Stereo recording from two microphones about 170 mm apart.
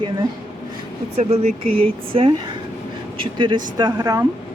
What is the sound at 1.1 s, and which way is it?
Speech, 40° right (ahead or behind).